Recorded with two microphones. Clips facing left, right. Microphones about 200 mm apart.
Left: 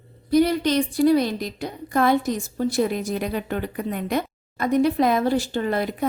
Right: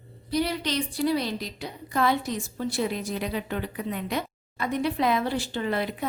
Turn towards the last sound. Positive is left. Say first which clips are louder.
# left 4 dB
turn(degrees=45)  # may be behind; listen again after turning